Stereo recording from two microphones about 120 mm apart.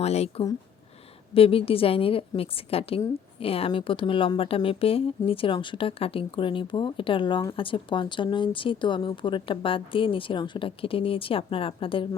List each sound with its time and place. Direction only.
0.0 s a woman's voice: 60° left (ahead or behind)